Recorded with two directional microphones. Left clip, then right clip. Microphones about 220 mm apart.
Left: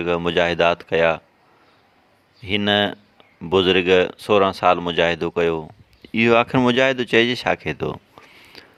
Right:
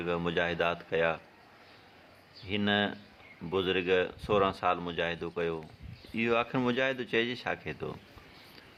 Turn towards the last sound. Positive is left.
turn(degrees=40)  # may be behind; listen again after turning